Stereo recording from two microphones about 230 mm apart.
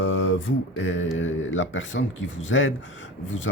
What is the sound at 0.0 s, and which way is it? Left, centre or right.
Mantra, left.